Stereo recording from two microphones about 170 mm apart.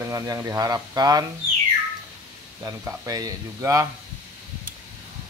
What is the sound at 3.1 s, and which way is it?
Speech, 20° right (ahead or behind).